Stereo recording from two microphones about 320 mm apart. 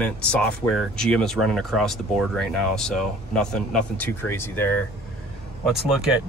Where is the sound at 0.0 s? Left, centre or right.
Centre.